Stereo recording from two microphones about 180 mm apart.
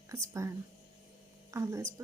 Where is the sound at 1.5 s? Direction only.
15° right (ahead or behind).